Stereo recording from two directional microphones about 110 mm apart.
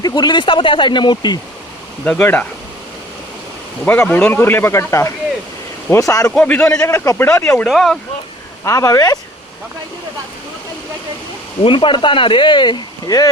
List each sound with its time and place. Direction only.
0.0 s speech: 40° left (ahead or behind)
2.0 s speech: 10° left (ahead or behind)
3.8 s speech: 15° left (ahead or behind); by 6.3 s 30° left (ahead or behind)
6.3 s speech: 15° left (ahead or behind)
6.8 s speech: 25° left (ahead or behind)
7.7 s speech: centre (ahead or behind)
8.6 s speech: 30° left (ahead or behind)
11.6 s speech: 50° left (ahead or behind)